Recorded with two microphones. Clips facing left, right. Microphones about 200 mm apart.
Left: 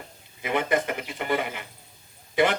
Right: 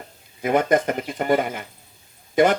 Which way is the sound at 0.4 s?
45° right (ahead or behind).